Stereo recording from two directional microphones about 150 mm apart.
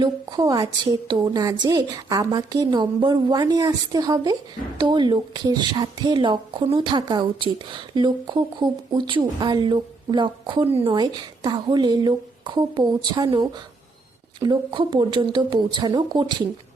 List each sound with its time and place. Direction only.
0.0 s a woman's voice: 25° right (ahead or behind)